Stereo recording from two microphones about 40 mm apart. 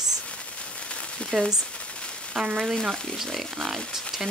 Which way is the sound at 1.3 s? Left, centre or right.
Centre.